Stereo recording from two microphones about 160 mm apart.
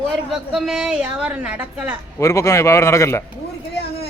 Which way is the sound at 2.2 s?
20° left (ahead or behind).